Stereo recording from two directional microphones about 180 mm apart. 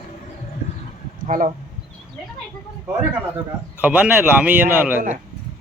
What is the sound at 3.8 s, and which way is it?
Speech, 10° right (ahead or behind).